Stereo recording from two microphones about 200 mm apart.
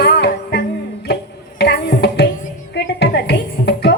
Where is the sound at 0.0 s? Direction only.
55° left (ahead or behind).